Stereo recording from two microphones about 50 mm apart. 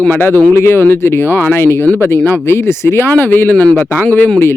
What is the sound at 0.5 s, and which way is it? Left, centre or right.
Speech, left.